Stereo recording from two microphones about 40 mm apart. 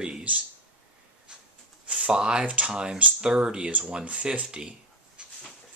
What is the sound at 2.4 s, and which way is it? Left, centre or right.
Speech, right.